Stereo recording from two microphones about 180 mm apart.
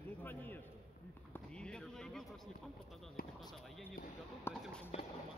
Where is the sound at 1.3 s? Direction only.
5° left (ahead or behind).